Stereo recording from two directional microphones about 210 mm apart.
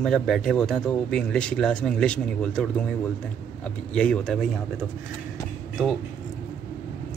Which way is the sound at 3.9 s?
5° left (ahead or behind).